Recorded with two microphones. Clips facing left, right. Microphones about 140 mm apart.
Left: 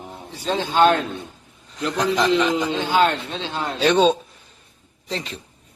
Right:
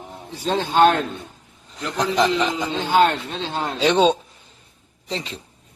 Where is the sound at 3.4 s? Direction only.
40° right (ahead or behind).